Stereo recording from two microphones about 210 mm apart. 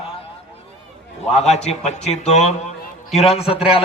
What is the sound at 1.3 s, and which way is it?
A man's voice, 30° left (ahead or behind).